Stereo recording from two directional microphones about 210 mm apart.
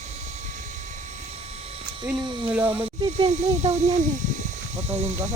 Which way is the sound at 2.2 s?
20° right (ahead or behind).